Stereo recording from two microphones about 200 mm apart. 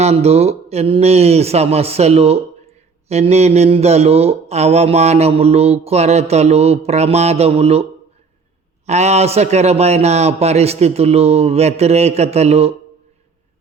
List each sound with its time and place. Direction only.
0.0 s mantra: 30° right (ahead or behind)
8.9 s mantra: 35° right (ahead or behind)